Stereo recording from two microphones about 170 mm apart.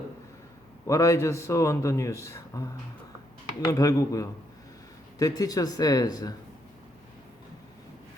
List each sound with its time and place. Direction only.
0.9 s a man's voice: 15° left (ahead or behind)
3.7 s speech: 20° left (ahead or behind)